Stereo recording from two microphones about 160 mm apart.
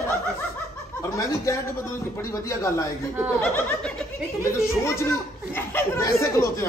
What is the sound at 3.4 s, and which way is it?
Speech, 10° left (ahead or behind).